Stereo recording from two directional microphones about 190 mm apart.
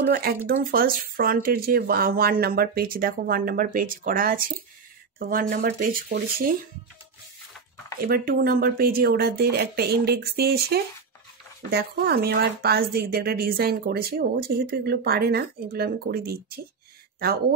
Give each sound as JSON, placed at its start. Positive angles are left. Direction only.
{"t": 0.0, "sound": "speech", "side_deg": -50}
{"t": 8.0, "sound": "speech", "side_deg": -50}